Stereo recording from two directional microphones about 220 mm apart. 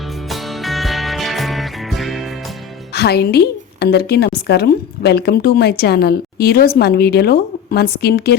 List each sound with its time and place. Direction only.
0.3 s music: centre (ahead or behind)
2.9 s a woman's voice: 45° left (ahead or behind)